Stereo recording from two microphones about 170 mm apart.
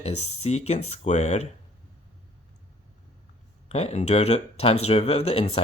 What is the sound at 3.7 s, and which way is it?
Speech, 40° left (ahead or behind).